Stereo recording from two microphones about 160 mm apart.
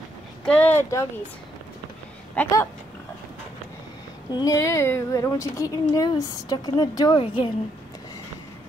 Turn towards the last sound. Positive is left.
turn(degrees=30)  # may be behind; listen again after turning